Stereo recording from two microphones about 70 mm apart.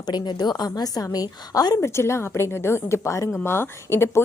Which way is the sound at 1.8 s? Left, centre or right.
Left.